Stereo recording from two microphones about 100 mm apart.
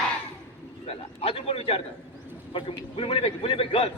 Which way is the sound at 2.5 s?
60° left (ahead or behind).